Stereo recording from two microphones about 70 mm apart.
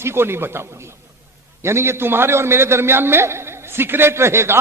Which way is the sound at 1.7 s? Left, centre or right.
Right.